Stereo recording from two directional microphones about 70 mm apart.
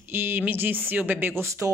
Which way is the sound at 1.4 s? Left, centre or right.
Right.